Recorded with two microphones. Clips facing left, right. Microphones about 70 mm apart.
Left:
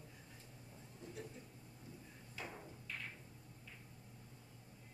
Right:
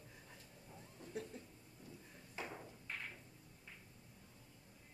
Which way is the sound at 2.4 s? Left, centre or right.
Right.